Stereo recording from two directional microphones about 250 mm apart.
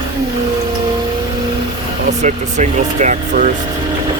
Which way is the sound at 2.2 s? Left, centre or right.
Right.